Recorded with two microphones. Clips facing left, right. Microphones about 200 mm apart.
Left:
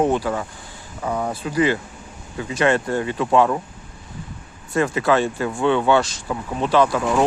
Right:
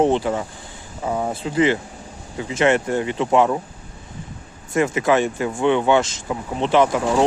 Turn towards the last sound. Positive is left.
turn(degrees=-20)  # may be behind; listen again after turning